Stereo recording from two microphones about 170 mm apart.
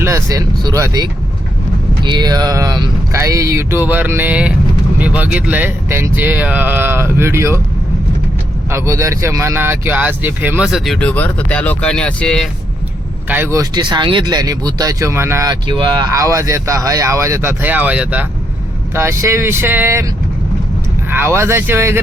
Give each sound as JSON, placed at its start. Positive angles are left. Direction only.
{"t": 0.0, "sound": "speech", "side_deg": -20}
{"t": 2.0, "sound": "speech", "side_deg": -25}
{"t": 8.7, "sound": "speech", "side_deg": -20}
{"t": 13.2, "sound": "speech", "side_deg": -10}
{"t": 21.1, "sound": "speech", "side_deg": -15}